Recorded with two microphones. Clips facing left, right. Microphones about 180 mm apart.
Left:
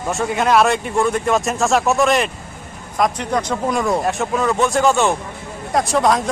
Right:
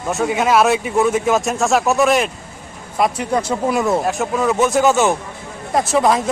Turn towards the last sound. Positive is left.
turn(degrees=-5)  # may be behind; listen again after turning